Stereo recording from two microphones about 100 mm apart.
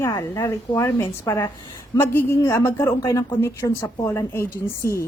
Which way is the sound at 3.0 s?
35° left (ahead or behind).